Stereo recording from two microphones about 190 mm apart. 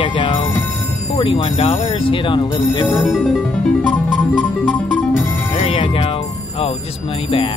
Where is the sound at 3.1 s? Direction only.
Centre (ahead or behind).